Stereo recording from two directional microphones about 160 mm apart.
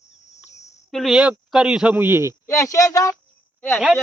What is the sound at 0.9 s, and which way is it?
Speech, centre (ahead or behind).